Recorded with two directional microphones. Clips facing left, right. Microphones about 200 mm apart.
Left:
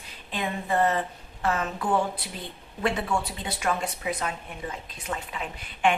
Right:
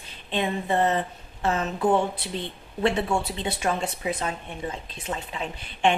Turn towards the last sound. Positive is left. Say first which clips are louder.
# right 2 dB
turn(degrees=-30)  # may be behind; listen again after turning